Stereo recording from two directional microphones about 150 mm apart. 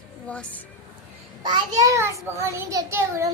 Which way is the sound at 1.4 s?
25° right (ahead or behind).